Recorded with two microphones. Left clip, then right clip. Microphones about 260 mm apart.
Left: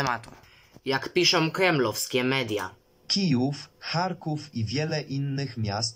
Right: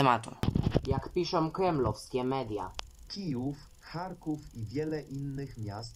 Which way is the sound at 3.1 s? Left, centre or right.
Left.